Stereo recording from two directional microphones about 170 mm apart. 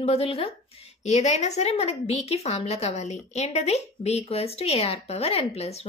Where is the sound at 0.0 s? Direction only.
35° left (ahead or behind).